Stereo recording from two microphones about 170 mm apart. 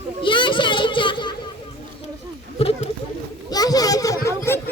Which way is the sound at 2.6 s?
35° left (ahead or behind).